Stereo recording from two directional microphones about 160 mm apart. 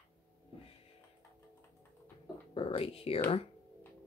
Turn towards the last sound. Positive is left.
turn(degrees=35)  # may be behind; listen again after turning